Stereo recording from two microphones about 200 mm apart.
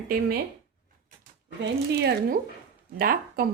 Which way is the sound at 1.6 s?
55° right (ahead or behind).